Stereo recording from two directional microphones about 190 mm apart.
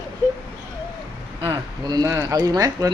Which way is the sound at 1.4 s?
20° right (ahead or behind).